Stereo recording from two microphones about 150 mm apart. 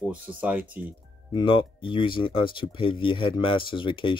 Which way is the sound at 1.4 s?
35° left (ahead or behind).